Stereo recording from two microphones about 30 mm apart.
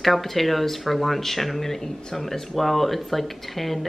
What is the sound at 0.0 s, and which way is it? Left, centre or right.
Speech, centre.